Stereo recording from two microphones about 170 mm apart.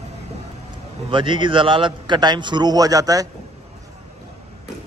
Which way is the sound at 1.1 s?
30° right (ahead or behind).